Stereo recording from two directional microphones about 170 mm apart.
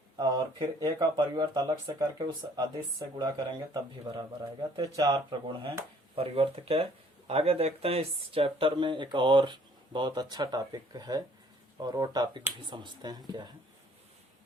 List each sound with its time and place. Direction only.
0.2 s speech: 25° right (ahead or behind)